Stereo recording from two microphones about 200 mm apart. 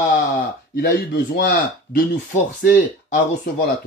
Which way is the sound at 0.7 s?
55° left (ahead or behind).